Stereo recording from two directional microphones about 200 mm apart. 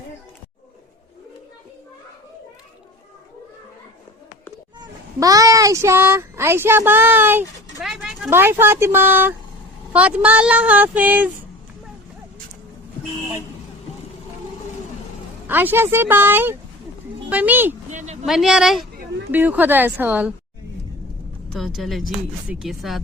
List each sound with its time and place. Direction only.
4.8 s speech: 15° right (ahead or behind)
15.4 s speech: 10° right (ahead or behind)
17.9 s a sound: 35° right (ahead or behind)
18.3 s speech: centre (ahead or behind)
21.5 s speech: centre (ahead or behind)